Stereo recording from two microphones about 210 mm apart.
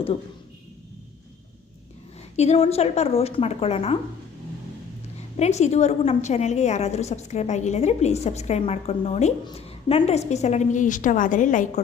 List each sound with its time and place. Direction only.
2.3 s a woman's voice: 30° left (ahead or behind)
5.4 s a woman's voice: 30° left (ahead or behind)